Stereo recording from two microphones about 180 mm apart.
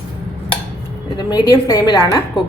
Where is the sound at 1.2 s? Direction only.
25° left (ahead or behind).